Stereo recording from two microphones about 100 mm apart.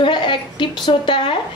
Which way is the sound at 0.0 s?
55° left (ahead or behind).